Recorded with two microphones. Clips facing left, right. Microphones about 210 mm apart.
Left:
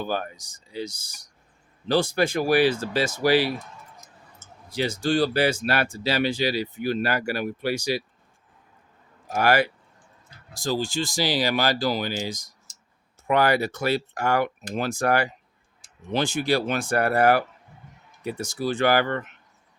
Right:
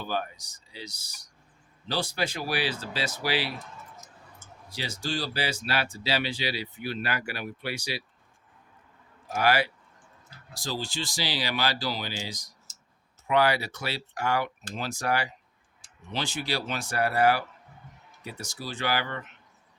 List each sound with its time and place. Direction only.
0.0 s speech: 50° left (ahead or behind)
4.7 s speech: 55° left (ahead or behind)
9.3 s speech: 50° left (ahead or behind)